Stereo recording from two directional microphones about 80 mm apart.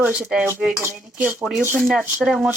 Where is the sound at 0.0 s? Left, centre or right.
Centre.